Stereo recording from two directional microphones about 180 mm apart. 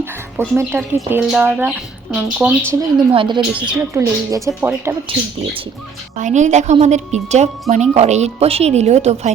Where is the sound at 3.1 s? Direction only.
25° right (ahead or behind).